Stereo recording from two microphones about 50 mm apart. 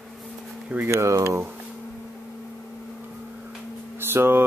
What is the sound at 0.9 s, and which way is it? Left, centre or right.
Speech, right.